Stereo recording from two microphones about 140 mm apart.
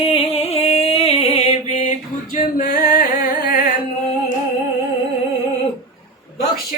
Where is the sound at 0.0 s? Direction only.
45° left (ahead or behind); by 3.6 s 90° left.